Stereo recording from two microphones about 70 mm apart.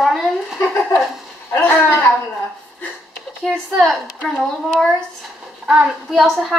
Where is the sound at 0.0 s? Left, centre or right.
Centre.